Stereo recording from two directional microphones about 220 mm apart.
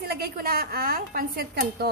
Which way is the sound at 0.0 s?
45° right (ahead or behind).